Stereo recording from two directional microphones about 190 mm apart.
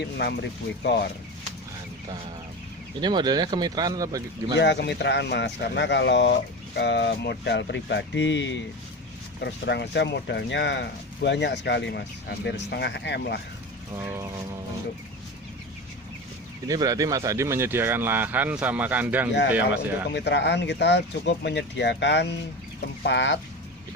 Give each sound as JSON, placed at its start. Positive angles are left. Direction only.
{"t": 0.0, "sound": "speech", "side_deg": 60}
{"t": 3.0, "sound": "speech", "side_deg": -25}
{"t": 4.5, "sound": "speech", "side_deg": 65}
{"t": 13.9, "sound": "speech", "side_deg": -15}
{"t": 16.6, "sound": "speech", "side_deg": -20}
{"t": 20.1, "sound": "speech", "side_deg": 65}